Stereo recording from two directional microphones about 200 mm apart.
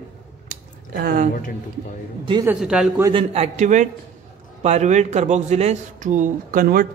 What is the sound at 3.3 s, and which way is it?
A man's voice, 35° right (ahead or behind).